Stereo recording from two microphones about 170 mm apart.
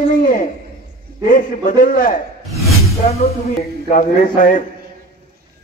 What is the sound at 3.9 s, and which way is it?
Speech, 50° left (ahead or behind).